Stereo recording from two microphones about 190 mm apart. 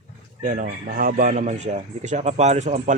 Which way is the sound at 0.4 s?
45° right (ahead or behind).